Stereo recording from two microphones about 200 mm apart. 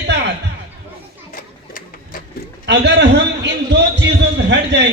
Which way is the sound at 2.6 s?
60° right (ahead or behind).